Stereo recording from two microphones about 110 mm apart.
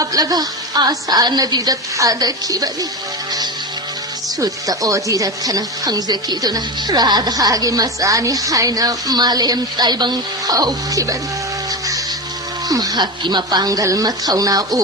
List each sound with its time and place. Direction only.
0.0 s speech: 35° right (ahead or behind)
4.4 s speech: 35° right (ahead or behind)
12.6 s speech: 35° right (ahead or behind)